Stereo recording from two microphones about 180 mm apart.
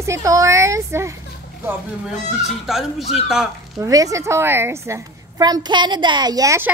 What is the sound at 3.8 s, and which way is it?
A woman's voice, 20° right (ahead or behind).